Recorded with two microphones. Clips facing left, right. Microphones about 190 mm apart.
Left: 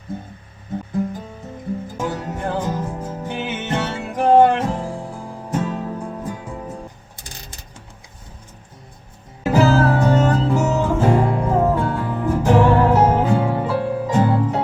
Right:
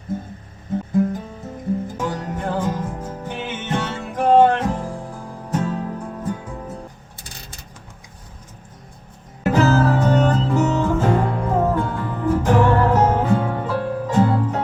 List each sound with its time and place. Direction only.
2.0 s music: 10° left (ahead or behind)
9.4 s music: 10° left (ahead or behind)